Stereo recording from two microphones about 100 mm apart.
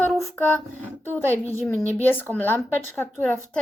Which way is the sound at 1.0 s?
20° left (ahead or behind).